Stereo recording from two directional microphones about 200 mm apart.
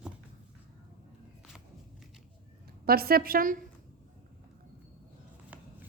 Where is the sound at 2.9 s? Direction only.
50° right (ahead or behind).